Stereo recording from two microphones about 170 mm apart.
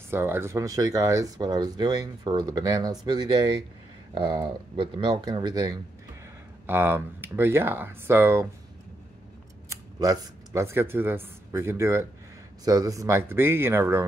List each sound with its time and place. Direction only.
0.1 s speech: 15° right (ahead or behind)
9.7 s speech: 20° right (ahead or behind)